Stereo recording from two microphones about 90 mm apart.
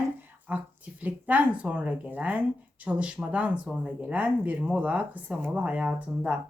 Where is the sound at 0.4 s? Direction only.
15° right (ahead or behind).